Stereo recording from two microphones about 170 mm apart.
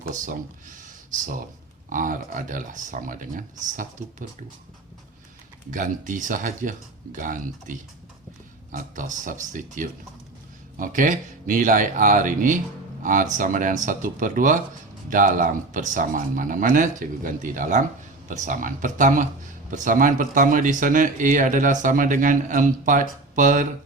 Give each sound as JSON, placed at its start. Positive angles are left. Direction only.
{"t": 1.1, "sound": "speech", "side_deg": -50}
{"t": 5.7, "sound": "speech", "side_deg": -50}